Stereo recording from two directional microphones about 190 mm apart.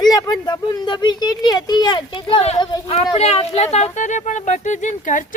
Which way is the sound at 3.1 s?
35° left (ahead or behind).